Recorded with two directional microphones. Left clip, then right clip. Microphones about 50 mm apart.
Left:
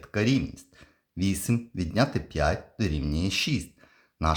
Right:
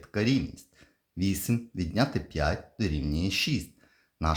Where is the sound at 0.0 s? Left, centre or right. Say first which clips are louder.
Left 2 dB; left.